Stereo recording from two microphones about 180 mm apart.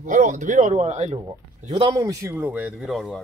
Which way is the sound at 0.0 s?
45° right (ahead or behind).